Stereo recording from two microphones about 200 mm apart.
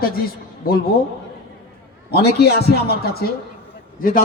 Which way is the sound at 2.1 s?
55° left (ahead or behind).